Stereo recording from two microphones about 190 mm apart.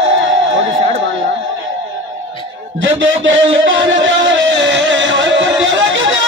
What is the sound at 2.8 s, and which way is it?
Music, 80° right.